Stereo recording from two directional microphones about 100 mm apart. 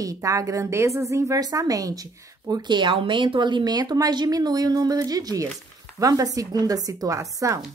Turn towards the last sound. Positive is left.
turn(degrees=-35)  # may be behind; listen again after turning